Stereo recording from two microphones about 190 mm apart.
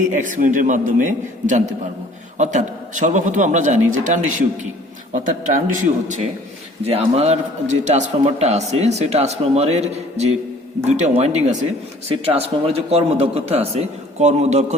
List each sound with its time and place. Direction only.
0.1 s a man's voice: 45° right (ahead or behind)